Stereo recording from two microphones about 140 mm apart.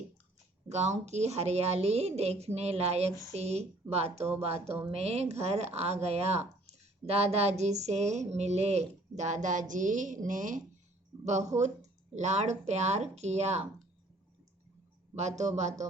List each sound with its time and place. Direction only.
0.7 s a man's voice: 55° right (ahead or behind)
11.3 s a man's voice: 55° right (ahead or behind)
15.1 s a man's voice: 55° right (ahead or behind)